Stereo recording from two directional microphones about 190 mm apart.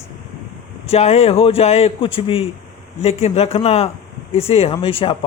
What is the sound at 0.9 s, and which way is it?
A man's voice, 35° left (ahead or behind).